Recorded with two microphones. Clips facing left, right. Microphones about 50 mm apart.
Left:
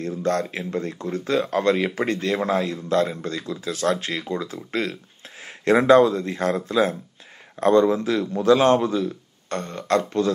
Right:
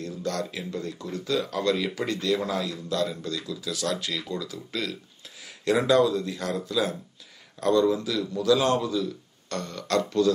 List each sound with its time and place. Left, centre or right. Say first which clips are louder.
0.0 s speech: left 7 dB; left